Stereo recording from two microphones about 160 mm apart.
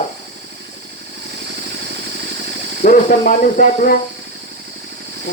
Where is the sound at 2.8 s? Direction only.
60° left (ahead or behind).